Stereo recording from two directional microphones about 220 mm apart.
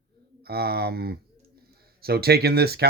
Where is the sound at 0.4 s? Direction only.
45° right (ahead or behind).